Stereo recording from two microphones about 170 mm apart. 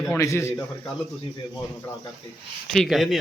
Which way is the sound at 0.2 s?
15° left (ahead or behind).